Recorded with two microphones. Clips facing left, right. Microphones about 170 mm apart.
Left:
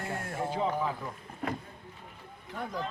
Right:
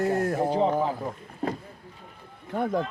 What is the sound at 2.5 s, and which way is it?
Speech, 55° right (ahead or behind).